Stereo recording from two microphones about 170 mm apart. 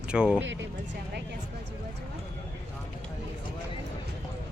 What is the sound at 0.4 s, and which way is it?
Speech, 90° right.